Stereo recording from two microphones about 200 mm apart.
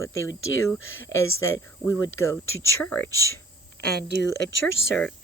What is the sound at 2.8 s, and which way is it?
Speech, 5° left (ahead or behind).